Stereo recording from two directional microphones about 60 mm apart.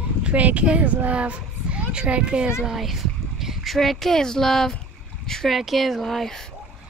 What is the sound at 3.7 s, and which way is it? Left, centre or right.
Speech, centre.